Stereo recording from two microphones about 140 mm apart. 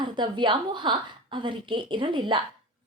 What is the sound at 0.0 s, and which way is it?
A woman's voice, 35° right (ahead or behind).